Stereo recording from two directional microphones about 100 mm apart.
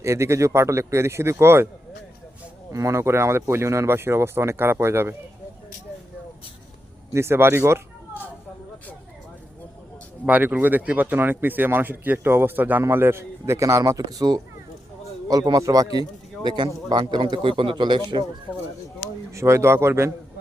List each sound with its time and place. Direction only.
0.0 s speech: 30° right (ahead or behind)
2.7 s speech: 30° right (ahead or behind)
7.1 s speech: 25° right (ahead or behind)
10.2 s a man's voice: 15° right (ahead or behind); by 18.0 s 50° right (ahead or behind)
18.5 s speech: 5° right (ahead or behind)
19.3 s speech: 30° right (ahead or behind)